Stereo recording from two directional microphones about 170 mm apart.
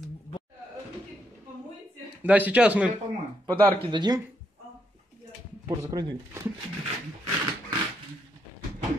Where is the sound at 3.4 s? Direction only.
30° right (ahead or behind).